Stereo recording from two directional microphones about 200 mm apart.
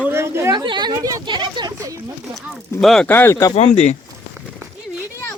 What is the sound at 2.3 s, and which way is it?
Speech, centre (ahead or behind).